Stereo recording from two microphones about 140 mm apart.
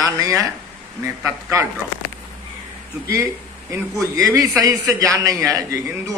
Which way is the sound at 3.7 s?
20° right (ahead or behind).